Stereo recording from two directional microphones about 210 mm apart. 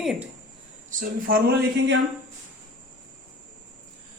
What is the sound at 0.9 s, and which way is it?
A man's voice, 40° right (ahead or behind).